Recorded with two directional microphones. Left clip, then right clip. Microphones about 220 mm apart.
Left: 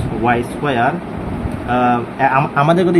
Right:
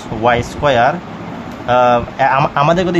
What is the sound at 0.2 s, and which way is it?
Speech, 20° right (ahead or behind).